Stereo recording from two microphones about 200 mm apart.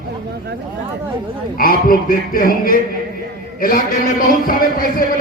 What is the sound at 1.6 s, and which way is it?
A man's voice, 45° left (ahead or behind).